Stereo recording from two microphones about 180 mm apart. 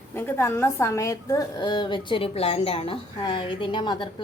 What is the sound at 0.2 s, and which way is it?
A woman's voice, 15° left (ahead or behind).